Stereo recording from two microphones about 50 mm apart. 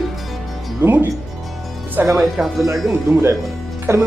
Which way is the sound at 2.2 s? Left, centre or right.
Centre.